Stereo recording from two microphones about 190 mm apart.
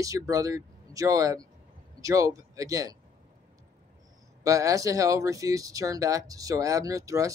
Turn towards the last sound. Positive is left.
turn(degrees=-15)  # may be behind; listen again after turning